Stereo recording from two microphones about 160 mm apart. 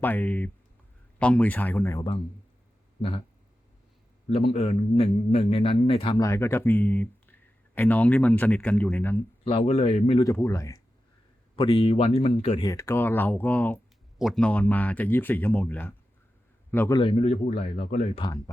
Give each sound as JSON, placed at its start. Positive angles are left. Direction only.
{"t": 0.0, "sound": "speech", "side_deg": 10}
{"t": 4.4, "sound": "speech", "side_deg": 40}
{"t": 6.1, "sound": "speech", "side_deg": 15}
{"t": 9.4, "sound": "speech", "side_deg": 35}
{"t": 10.2, "sound": "speech", "side_deg": 20}
{"t": 11.5, "sound": "speech", "side_deg": 30}
{"t": 12.6, "sound": "speech", "side_deg": 15}
{"t": 16.9, "sound": "speech", "side_deg": 30}
{"t": 17.2, "sound": "speech", "side_deg": 45}
{"t": 17.9, "sound": "speech", "side_deg": 35}